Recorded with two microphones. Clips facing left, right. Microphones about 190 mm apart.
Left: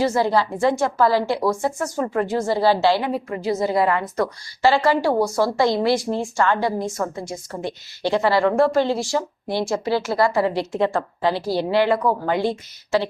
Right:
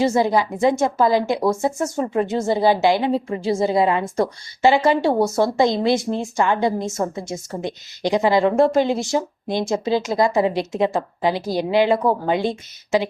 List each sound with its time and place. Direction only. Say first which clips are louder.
0.0 s a woman's voice: right 1 dB; 20° right (ahead or behind)